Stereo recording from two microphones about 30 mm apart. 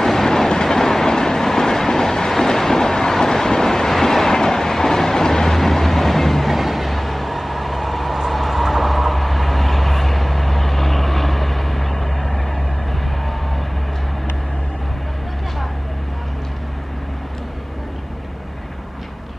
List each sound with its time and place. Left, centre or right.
0.0 s train: centre
6.5 s vehicle: centre